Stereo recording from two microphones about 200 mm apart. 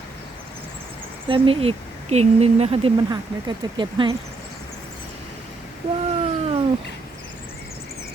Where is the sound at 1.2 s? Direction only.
25° right (ahead or behind).